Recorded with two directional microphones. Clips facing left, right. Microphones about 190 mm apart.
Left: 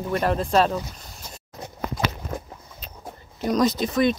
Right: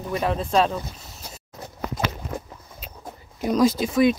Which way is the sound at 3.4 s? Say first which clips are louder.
Right 2 dB; 5° right (ahead or behind).